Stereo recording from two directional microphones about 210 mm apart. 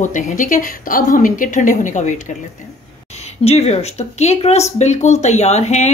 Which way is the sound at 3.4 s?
30° left (ahead or behind).